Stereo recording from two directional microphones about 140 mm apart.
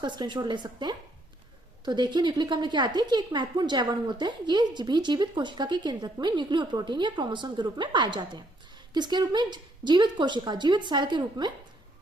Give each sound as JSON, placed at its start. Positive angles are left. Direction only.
{"t": 0.0, "sound": "a woman's voice", "side_deg": -30}